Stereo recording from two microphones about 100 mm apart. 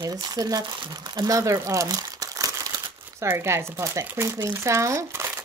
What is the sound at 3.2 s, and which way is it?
Speech, 25° right (ahead or behind).